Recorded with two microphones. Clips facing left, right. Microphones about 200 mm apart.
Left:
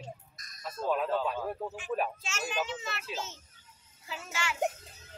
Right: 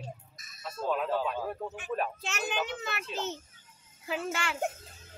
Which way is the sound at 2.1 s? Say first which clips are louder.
Right 1 dB; 60° right (ahead or behind).